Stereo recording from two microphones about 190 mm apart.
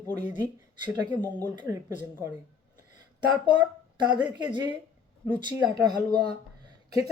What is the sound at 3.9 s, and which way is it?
Speech, 20° right (ahead or behind).